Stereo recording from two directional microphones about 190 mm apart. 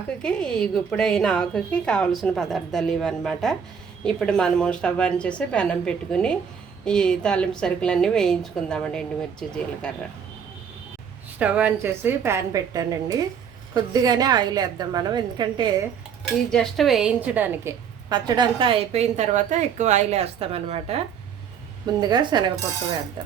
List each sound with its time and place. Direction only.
0.2 s a woman's voice: 5° left (ahead or behind)
11.3 s a woman's voice: 5° right (ahead or behind); by 15.7 s 20° right (ahead or behind)
16.5 s a woman's voice: centre (ahead or behind); by 21.0 s 35° right (ahead or behind)
22.1 s a woman's voice: 25° right (ahead or behind)